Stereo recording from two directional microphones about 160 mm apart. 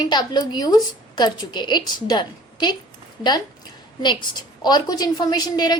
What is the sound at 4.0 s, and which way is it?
A woman's voice, 30° left (ahead or behind).